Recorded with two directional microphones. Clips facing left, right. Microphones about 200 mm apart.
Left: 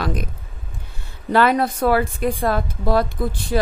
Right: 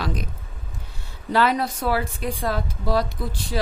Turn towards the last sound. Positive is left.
turn(degrees=55)  # may be behind; listen again after turning